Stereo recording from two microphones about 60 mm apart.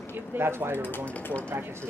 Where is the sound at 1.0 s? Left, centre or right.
Left.